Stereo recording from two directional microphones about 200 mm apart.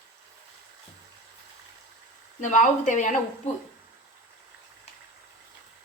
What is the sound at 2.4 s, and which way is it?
Speech, 40° left (ahead or behind).